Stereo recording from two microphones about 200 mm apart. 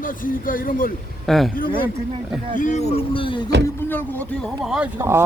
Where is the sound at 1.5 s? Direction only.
45° left (ahead or behind).